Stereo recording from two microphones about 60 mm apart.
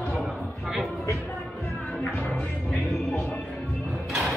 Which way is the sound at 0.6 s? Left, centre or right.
Centre.